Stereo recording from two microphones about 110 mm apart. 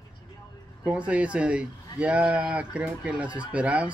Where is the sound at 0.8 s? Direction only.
10° right (ahead or behind).